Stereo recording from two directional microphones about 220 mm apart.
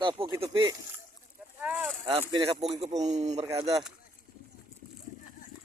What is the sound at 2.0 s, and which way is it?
A man's voice, 20° right (ahead or behind).